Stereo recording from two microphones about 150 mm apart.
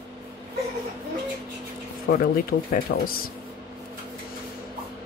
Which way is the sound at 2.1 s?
70° left (ahead or behind).